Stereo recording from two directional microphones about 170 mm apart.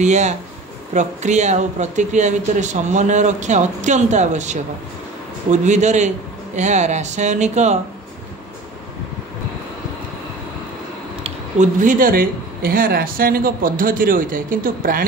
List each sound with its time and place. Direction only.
0.0 s speech: 45° right (ahead or behind)
11.2 s speech: 45° right (ahead or behind)